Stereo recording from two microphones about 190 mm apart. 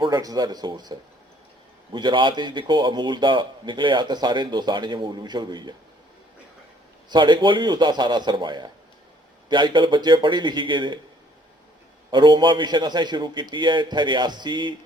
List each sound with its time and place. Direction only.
0.0 s a man's voice: 20° right (ahead or behind)
7.1 s a man's voice: 25° right (ahead or behind)
12.1 s a man's voice: 25° right (ahead or behind)